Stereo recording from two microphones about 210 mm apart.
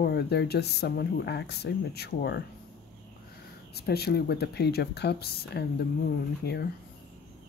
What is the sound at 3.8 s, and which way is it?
Speech, 50° left (ahead or behind).